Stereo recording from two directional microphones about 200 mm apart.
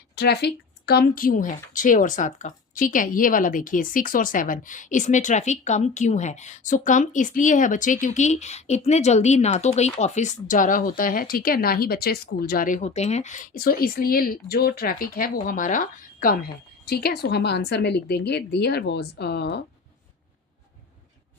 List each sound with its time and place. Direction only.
0.2 s a woman's voice: 55° left (ahead or behind)